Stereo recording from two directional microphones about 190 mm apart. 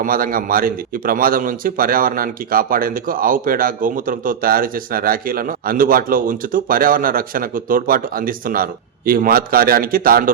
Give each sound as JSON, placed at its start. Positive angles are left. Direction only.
{"t": 0.0, "sound": "a man's voice", "side_deg": -50}